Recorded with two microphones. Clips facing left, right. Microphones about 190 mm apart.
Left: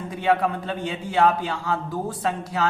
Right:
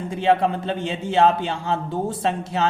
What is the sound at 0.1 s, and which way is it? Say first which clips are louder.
Speech: right 3 dB; 25° right (ahead or behind).